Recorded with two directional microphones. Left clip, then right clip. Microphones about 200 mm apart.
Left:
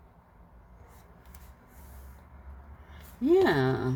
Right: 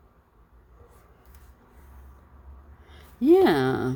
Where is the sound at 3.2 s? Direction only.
50° right (ahead or behind).